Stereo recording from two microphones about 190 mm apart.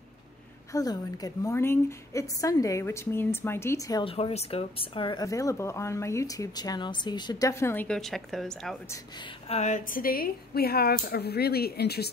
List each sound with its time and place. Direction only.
0.7 s speech: 20° left (ahead or behind)
4.1 s speech: 30° left (ahead or behind); by 8.7 s centre (ahead or behind)
9.5 s speech: 40° left (ahead or behind); by 12.1 s 55° left (ahead or behind)